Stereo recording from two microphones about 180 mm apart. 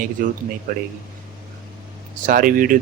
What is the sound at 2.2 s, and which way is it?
Speech, 50° right (ahead or behind).